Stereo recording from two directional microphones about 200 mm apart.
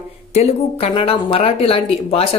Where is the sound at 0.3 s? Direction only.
35° left (ahead or behind).